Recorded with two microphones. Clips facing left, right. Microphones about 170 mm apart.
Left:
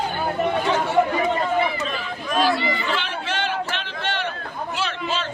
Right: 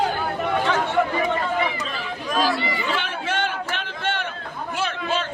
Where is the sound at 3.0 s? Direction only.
50° right (ahead or behind).